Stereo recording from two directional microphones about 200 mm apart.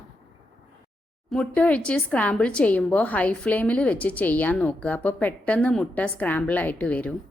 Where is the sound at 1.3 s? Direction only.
5° left (ahead or behind).